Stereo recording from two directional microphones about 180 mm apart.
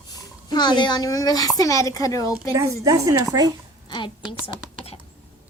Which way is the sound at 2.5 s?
15° right (ahead or behind).